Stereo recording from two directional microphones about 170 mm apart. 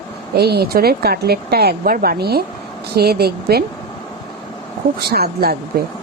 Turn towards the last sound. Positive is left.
turn(degrees=-65)  # may be behind; listen again after turning